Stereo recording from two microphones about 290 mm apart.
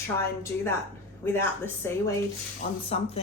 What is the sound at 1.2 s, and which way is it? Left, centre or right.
Speech, centre.